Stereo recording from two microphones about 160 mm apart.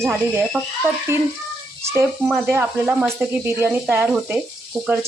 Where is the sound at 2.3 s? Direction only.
Centre (ahead or behind).